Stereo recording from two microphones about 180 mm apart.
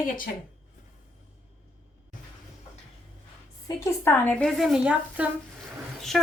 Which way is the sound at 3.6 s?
15° left (ahead or behind).